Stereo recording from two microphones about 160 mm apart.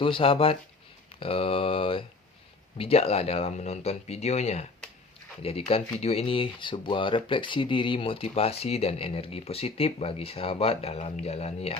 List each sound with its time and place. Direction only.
0.0 s speech: 35° left (ahead or behind)